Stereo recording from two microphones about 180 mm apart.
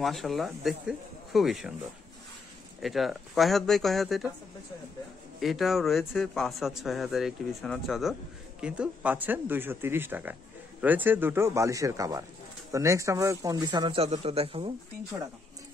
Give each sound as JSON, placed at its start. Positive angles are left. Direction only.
{"t": 0.0, "sound": "a man's voice", "side_deg": 0}
{"t": 2.8, "sound": "a man's voice", "side_deg": 0}
{"t": 5.4, "sound": "a man's voice", "side_deg": 0}